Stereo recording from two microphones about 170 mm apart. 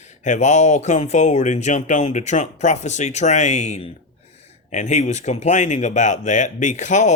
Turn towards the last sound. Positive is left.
turn(degrees=45)  # may be behind; listen again after turning